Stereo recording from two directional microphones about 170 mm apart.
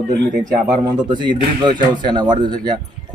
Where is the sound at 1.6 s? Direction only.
25° right (ahead or behind).